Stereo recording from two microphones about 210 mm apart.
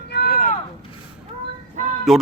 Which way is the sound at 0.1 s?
45° left (ahead or behind).